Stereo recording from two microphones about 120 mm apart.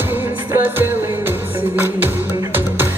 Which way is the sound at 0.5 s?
15° right (ahead or behind).